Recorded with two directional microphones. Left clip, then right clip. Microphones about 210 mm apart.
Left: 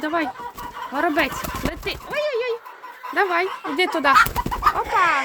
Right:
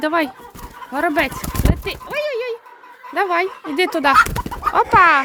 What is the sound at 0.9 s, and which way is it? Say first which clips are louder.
Speech: right 3 dB; 30° right (ahead or behind).